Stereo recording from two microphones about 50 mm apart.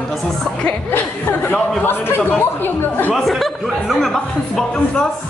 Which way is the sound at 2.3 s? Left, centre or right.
Left.